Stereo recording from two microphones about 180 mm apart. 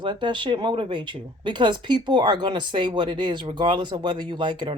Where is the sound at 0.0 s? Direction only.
25° right (ahead or behind).